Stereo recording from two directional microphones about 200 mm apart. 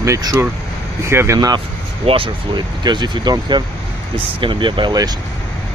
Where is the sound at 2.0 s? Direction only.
25° right (ahead or behind).